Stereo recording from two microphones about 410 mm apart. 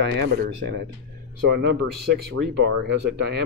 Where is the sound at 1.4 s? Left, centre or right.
Right.